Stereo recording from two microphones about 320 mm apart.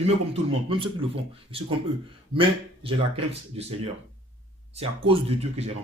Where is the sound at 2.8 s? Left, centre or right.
Centre.